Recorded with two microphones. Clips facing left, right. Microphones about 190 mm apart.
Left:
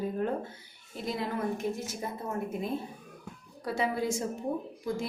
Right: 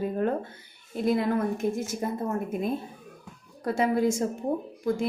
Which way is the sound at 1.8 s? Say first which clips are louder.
Right 7 dB; 45° right (ahead or behind).